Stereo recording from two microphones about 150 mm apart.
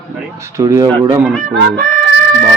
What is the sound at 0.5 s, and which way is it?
Speech, 20° right (ahead or behind).